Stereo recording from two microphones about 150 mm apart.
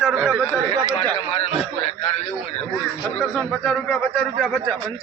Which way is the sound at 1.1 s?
40° left (ahead or behind).